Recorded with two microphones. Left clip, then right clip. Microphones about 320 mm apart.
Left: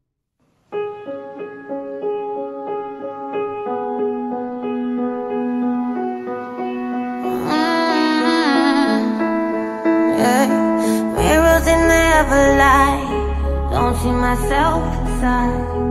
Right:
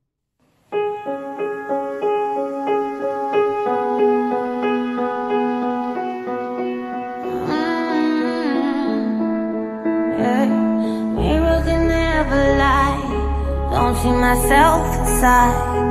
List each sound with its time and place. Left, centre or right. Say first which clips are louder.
3.3 s music: right 4 dB; right; by 5.9 s centre
7.2 s music: left 3 dB; centre; by 11.4 s left
11.5 s music: left 5 dB; left; by 13.2 s centre
13.7 s music: right 1 dB; centre; by 15.5 s right